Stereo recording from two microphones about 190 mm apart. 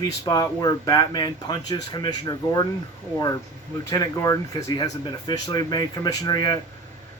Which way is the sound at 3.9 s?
20° left (ahead or behind).